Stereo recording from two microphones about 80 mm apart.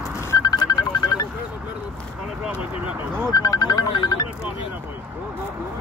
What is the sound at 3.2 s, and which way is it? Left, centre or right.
Music, left.